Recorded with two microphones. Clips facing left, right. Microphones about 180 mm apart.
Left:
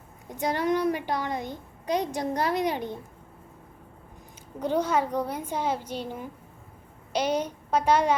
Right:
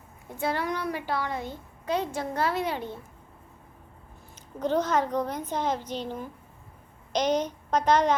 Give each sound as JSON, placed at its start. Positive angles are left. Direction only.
{"t": 0.3, "sound": "a child's voice", "side_deg": 15}
{"t": 4.6, "sound": "a child's voice", "side_deg": 10}